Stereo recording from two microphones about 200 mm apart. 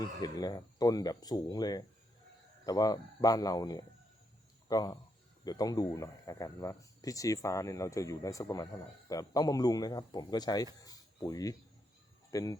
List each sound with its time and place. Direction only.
0.0 s speech: 20° left (ahead or behind)